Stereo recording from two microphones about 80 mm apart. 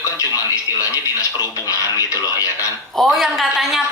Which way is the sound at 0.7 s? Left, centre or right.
Left.